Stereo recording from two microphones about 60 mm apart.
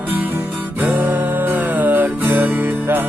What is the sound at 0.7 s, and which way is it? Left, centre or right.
Music, right.